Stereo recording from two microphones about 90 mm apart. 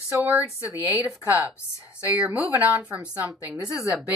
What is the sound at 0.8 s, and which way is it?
Speech, 20° right (ahead or behind).